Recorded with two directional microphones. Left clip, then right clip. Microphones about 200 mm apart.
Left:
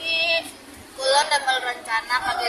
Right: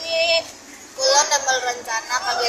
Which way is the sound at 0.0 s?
10° left (ahead or behind).